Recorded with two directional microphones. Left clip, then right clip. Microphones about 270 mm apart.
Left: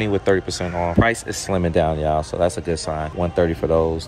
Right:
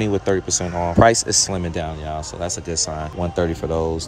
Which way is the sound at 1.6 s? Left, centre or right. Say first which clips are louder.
Left 8 dB; centre.